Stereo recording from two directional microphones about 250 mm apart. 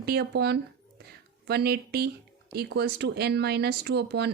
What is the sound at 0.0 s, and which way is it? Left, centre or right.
Speech, right.